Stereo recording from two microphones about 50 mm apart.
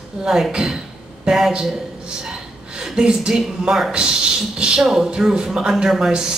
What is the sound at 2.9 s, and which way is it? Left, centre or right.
A woman's voice, centre.